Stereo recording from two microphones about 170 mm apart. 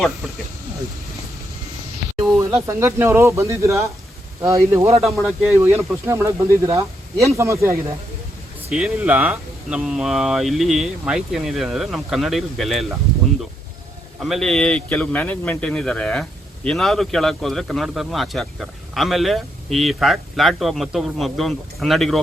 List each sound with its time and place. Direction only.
2.6 s speech: 15° right (ahead or behind)
5.0 s speech: centre (ahead or behind)
5.5 s speech: 15° right (ahead or behind)
8.7 s speech: 5° right (ahead or behind)
14.2 s speech: centre (ahead or behind)